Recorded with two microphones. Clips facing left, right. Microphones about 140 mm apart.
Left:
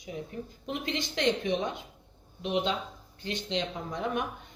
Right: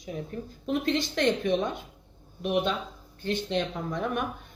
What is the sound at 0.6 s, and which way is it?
Speech, 20° left (ahead or behind).